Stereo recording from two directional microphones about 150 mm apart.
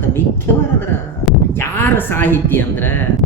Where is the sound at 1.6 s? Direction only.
15° left (ahead or behind).